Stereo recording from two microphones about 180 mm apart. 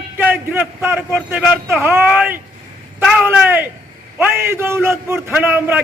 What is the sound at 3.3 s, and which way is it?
A man's voice, 10° right (ahead or behind).